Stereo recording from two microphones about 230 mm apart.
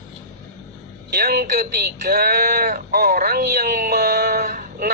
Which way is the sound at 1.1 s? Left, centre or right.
Right.